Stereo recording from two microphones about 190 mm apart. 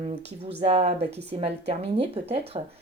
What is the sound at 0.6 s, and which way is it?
Speech, 35° right (ahead or behind).